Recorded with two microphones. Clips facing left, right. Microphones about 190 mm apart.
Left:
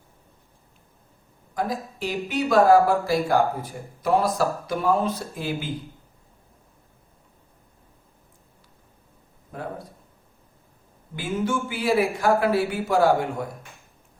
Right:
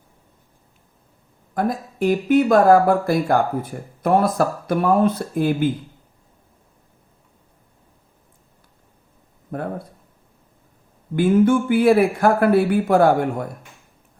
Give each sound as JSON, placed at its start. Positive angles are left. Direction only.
{"t": 1.5, "sound": "speech", "side_deg": -55}
{"t": 9.5, "sound": "speech", "side_deg": -55}
{"t": 11.1, "sound": "speech", "side_deg": -55}